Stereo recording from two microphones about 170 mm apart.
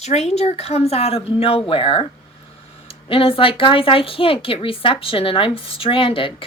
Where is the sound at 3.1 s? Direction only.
30° left (ahead or behind).